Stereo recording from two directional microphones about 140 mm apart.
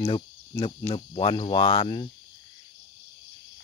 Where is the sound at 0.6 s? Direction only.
35° left (ahead or behind).